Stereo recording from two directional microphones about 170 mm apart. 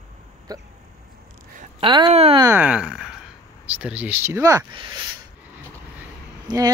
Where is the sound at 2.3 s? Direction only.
15° right (ahead or behind).